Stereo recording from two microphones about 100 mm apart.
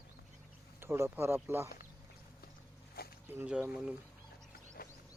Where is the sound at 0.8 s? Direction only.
25° right (ahead or behind).